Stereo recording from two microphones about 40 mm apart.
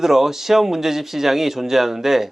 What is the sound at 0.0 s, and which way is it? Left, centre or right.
Speech, centre.